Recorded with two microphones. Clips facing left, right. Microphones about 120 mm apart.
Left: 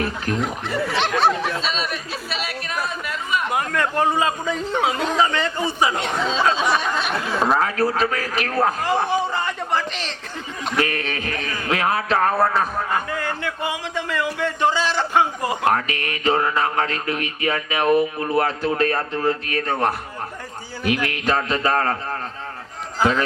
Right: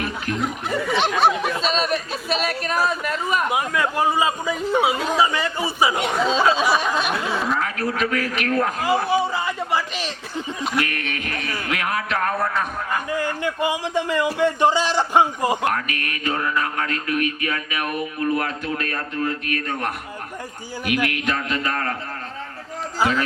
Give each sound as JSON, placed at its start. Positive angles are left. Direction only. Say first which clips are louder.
{"t": 0.8, "sound": "snicker", "louder": "even", "side_deg": 0}
{"t": 1.0, "sound": "chatter", "louder": "even", "side_deg": -10}
{"t": 1.6, "sound": "speech", "louder": "right 4 dB", "side_deg": -45}
{"t": 3.5, "sound": "a man's voice", "louder": "even", "side_deg": -5}
{"t": 7.5, "sound": "speech", "louder": "left 4 dB", "side_deg": 35}
{"t": 9.0, "sound": "a sound", "louder": "right 1 dB", "side_deg": -5}
{"t": 10.8, "sound": "speech", "louder": "left 5 dB", "side_deg": 30}
{"t": 13.4, "sound": "a man's voice", "louder": "right 3 dB", "side_deg": -15}
{"t": 15.7, "sound": "mantra", "louder": "left 3 dB", "side_deg": 30}
{"t": 20.8, "sound": "speech", "louder": "left 1 dB", "side_deg": 30}